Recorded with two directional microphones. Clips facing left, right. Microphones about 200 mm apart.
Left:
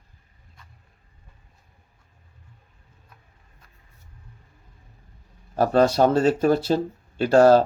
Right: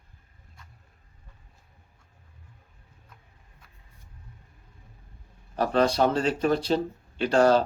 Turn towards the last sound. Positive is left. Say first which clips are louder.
# left 5 dB
turn(degrees=45)  # may be behind; listen again after turning